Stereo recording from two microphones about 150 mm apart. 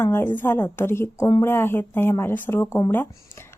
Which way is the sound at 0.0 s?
15° left (ahead or behind).